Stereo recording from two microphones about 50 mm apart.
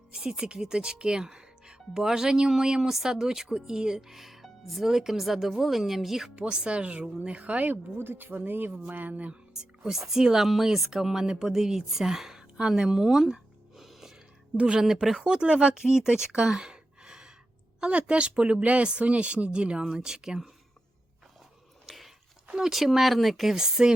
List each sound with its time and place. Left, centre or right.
0.1 s speech: centre
6.3 s speech: centre
7.9 s speech: right
8.7 s speech: right
9.9 s speech: centre
14.5 s speech: right
15.0 s speech: centre
21.8 s biting: centre
22.5 s speech: centre